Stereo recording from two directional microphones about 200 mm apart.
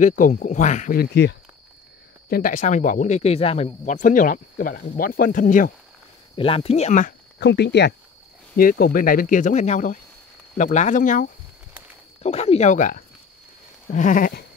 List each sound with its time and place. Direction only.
0.0 s speech: 40° left (ahead or behind)
6.3 s speech: 30° left (ahead or behind)
7.3 s speech: 55° left (ahead or behind)
8.5 s speech: 45° left (ahead or behind)